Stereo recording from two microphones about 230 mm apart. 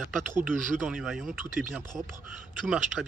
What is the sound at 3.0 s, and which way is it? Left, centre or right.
Speech, centre.